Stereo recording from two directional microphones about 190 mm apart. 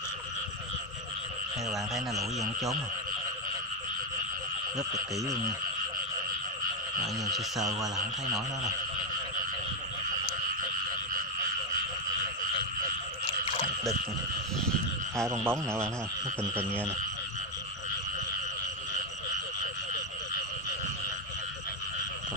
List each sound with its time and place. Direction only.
1.7 s speech: centre (ahead or behind)
4.9 s speech: 15° right (ahead or behind)
7.2 s speech: centre (ahead or behind)
15.4 s speech: 15° right (ahead or behind)